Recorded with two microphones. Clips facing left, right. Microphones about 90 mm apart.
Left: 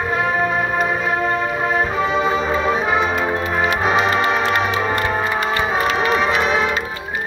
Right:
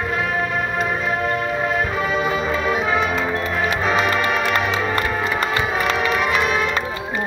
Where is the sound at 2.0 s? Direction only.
25° left (ahead or behind).